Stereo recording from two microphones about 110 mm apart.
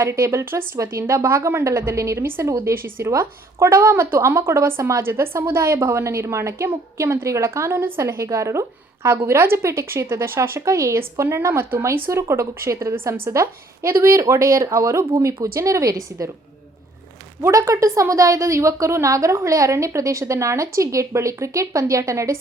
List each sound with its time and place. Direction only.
0.0 s a woman's voice: 25° right (ahead or behind)
17.4 s a woman's voice: 30° right (ahead or behind)